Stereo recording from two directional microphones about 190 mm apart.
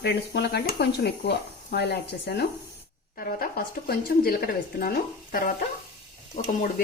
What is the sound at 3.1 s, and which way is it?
Speech, 50° left (ahead or behind).